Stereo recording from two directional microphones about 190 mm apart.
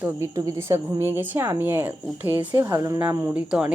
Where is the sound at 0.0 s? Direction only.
15° right (ahead or behind).